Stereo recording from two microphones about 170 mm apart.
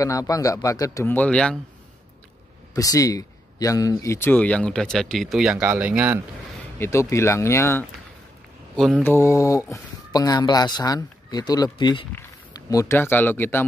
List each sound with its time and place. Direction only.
0.0 s speech: 20° left (ahead or behind)
2.7 s speech: 20° left (ahead or behind); by 6.2 s 10° right (ahead or behind)
6.8 s speech: 15° left (ahead or behind)
8.7 s speech: 5° left (ahead or behind)
9.0 s speech: 15° left (ahead or behind)